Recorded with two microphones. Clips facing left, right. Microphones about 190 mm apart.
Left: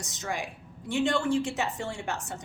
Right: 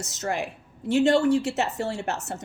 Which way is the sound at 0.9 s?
40° right (ahead or behind).